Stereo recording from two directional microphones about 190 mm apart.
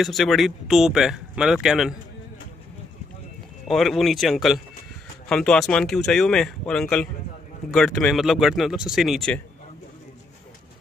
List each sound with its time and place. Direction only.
0.0 s speech: centre (ahead or behind)
3.6 s speech: centre (ahead or behind)